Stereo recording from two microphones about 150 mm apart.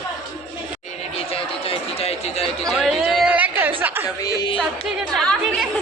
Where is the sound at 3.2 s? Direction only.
10° right (ahead or behind).